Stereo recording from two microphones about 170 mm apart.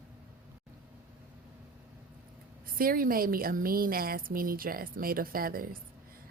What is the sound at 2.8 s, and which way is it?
A woman's voice, 60° right (ahead or behind).